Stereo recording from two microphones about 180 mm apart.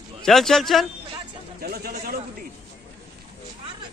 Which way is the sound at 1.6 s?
55° right (ahead or behind).